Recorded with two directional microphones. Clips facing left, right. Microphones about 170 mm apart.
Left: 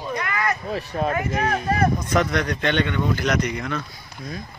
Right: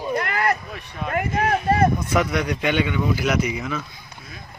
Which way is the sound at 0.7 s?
35° left (ahead or behind).